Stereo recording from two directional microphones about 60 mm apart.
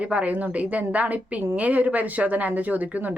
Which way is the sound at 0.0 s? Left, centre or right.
Right.